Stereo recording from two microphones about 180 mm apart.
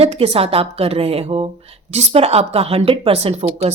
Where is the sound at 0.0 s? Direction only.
35° right (ahead or behind).